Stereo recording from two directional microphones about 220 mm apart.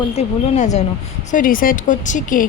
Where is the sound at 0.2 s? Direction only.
30° left (ahead or behind).